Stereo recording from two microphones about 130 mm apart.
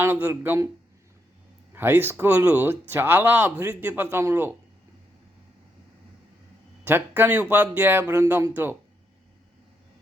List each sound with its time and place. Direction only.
0.0 s speech: 15° right (ahead or behind)
1.7 s speech: 15° right (ahead or behind)
6.8 s speech: 15° right (ahead or behind)